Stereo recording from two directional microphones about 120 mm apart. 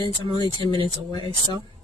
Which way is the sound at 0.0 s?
40° right (ahead or behind).